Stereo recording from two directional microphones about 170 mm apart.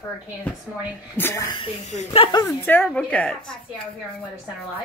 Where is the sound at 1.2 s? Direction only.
10° left (ahead or behind).